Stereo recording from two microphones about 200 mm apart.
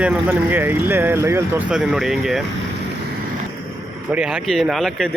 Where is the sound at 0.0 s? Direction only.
5° right (ahead or behind).